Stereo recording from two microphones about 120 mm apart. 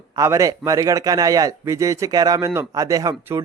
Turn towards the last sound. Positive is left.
turn(degrees=-30)  # may be behind; listen again after turning